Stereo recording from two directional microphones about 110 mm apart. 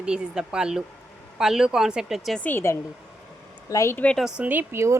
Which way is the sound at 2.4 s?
20° left (ahead or behind).